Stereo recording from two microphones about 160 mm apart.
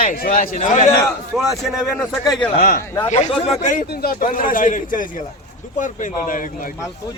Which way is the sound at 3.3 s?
30° left (ahead or behind).